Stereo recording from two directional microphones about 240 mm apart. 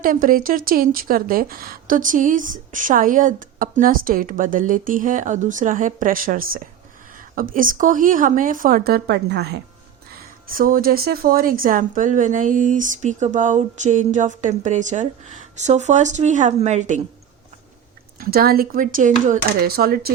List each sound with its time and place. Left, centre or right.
0.0 s a woman's voice: right
18.2 s a woman's voice: right